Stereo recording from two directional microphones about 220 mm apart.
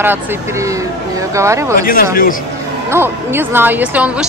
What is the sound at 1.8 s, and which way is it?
Speech, 40° left (ahead or behind).